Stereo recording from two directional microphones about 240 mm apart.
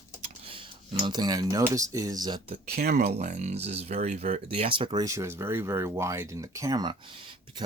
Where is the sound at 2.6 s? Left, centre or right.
Right.